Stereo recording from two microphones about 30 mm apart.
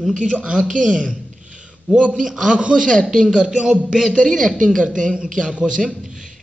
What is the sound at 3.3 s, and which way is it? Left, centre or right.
Music, right.